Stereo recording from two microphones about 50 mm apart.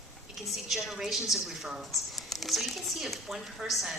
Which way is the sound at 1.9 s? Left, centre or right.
Centre.